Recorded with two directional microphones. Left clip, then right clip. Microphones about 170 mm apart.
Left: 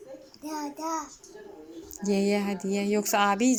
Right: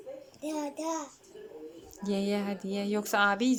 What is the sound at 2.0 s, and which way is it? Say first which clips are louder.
Speech: left 5 dB; 5° left (ahead or behind).